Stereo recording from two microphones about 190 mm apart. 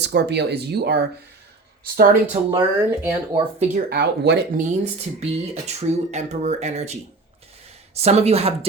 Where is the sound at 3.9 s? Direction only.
60° right (ahead or behind).